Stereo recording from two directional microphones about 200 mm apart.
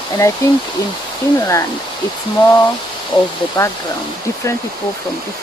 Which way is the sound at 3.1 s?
25° left (ahead or behind).